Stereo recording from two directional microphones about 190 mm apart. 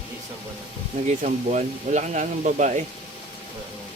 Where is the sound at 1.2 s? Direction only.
40° right (ahead or behind).